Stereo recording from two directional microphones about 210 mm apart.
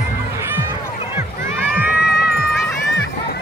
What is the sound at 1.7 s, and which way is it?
Music, 5° right (ahead or behind).